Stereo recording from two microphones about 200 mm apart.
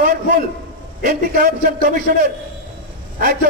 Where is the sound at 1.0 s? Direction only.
45° right (ahead or behind).